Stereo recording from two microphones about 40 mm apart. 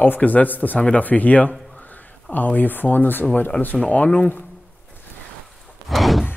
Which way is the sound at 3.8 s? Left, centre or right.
Left.